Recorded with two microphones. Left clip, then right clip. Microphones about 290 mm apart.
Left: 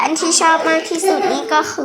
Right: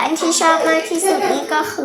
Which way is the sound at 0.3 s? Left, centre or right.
Centre.